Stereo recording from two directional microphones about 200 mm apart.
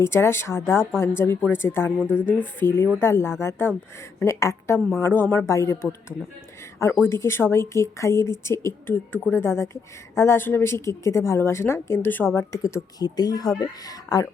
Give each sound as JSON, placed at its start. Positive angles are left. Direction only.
{"t": 0.0, "sound": "a woman's voice", "side_deg": 10}
{"t": 2.0, "sound": "speech", "side_deg": -5}
{"t": 2.2, "sound": "a woman's voice", "side_deg": 10}